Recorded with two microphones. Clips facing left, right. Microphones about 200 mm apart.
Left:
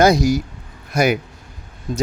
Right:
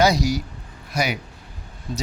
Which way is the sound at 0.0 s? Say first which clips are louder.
Left 5 dB; 50° left (ahead or behind).